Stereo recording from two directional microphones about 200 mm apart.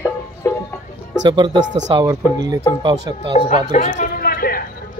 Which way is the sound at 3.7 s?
40° left (ahead or behind).